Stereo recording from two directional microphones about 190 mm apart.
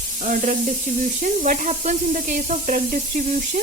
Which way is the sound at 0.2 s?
45° right (ahead or behind).